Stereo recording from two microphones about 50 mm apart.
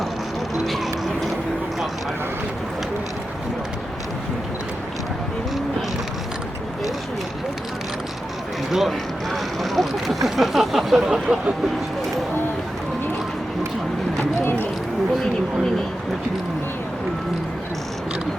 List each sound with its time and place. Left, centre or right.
0.5 s music: centre
8.7 s a sound: centre
11.0 s vehicle: centre